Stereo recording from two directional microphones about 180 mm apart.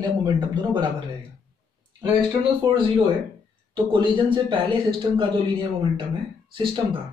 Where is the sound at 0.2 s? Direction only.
25° right (ahead or behind).